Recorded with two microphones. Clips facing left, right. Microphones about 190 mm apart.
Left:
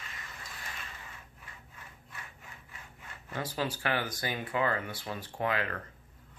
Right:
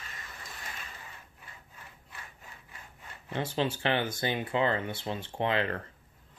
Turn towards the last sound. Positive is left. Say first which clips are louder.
# right 3 dB
turn(degrees=-25)  # may be behind; listen again after turning